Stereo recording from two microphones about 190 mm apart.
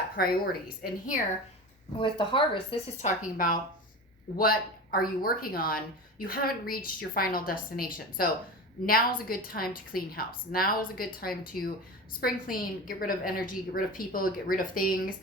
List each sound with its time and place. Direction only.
0.2 s speech: 50° left (ahead or behind)
2.0 s speech: 25° left (ahead or behind)
3.0 s speech: 45° left (ahead or behind)